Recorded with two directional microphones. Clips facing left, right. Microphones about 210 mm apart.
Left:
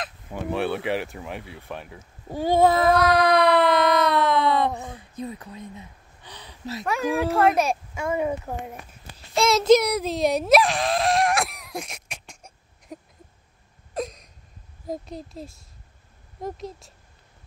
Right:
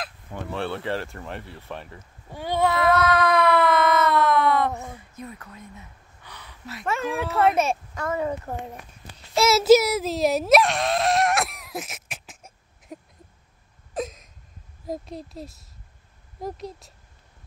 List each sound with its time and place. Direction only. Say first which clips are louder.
0.3 s speech: left 4 dB; 10° left (ahead or behind)
2.2 s child singing: left 5 dB; 40° left (ahead or behind)
3.5 s a sound: left 1 dB; 15° left (ahead or behind)
5.1 s a sound: left 5 dB; 30° left (ahead or behind)
7.2 s speech: left 1 dB; centre (ahead or behind)
8.0 s speech: left 2 dB; 10° left (ahead or behind)
9.3 s a sound: right 1 dB; 5° right (ahead or behind)
13.9 s hiccup: even; centre (ahead or behind)
14.9 s speech: even; centre (ahead or behind)